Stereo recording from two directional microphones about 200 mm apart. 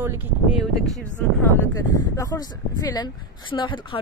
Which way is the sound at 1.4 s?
15° left (ahead or behind).